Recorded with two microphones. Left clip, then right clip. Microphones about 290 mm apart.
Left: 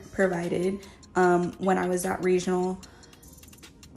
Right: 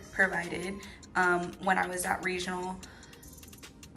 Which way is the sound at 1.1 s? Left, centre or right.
Left.